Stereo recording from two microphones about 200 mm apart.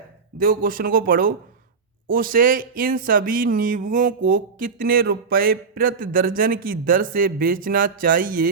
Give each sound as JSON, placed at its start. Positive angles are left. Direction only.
{"t": 0.3, "sound": "speech", "side_deg": -45}